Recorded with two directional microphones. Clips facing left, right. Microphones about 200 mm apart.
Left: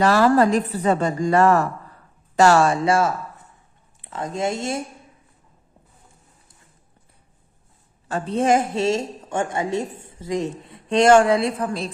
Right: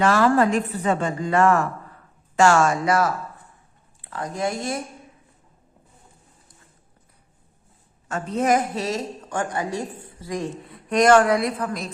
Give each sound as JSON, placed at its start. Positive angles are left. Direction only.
{"t": 0.0, "sound": "a woman's voice", "side_deg": 35}
{"t": 8.0, "sound": "a woman's voice", "side_deg": 30}